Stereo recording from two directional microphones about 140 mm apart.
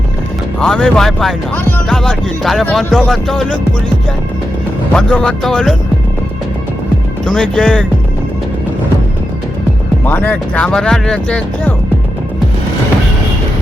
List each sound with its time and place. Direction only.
0.6 s speech: 5° left (ahead or behind)
4.9 s speech: 5° left (ahead or behind)
7.3 s speech: 5° left (ahead or behind)
10.1 s speech: 15° left (ahead or behind)